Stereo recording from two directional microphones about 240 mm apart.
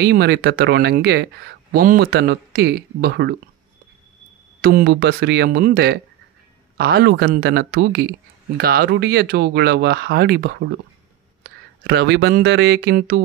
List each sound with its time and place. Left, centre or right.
0.0 s speech: right
4.6 s speech: right